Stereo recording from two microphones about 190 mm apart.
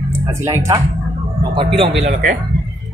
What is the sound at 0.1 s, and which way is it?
Speech, 15° right (ahead or behind).